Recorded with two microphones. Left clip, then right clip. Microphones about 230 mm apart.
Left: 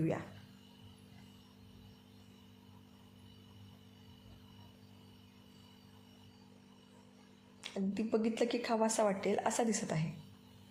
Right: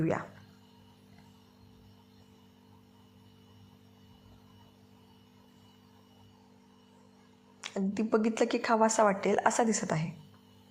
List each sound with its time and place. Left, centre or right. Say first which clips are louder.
7.6 s a woman's voice: right 5 dB; centre